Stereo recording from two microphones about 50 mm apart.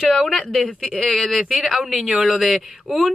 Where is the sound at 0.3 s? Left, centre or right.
Centre.